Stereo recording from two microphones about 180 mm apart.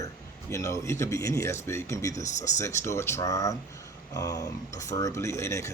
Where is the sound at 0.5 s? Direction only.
15° left (ahead or behind).